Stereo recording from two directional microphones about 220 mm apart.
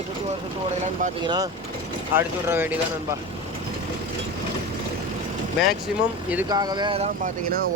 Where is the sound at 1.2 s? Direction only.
20° right (ahead or behind).